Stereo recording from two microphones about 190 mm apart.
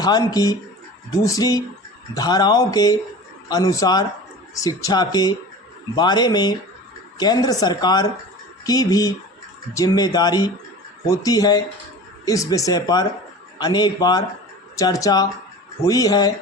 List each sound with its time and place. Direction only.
0.0 s a woman's voice: 20° left (ahead or behind)